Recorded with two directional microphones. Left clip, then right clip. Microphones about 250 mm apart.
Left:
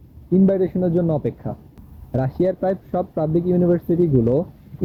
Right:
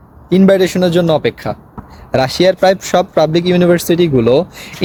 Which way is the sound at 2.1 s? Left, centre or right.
Centre.